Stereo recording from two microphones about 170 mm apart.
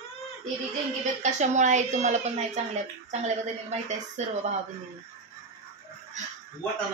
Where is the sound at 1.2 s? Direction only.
45° right (ahead or behind).